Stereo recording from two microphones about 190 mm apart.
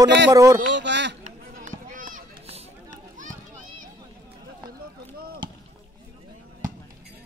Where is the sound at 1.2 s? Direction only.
40° right (ahead or behind).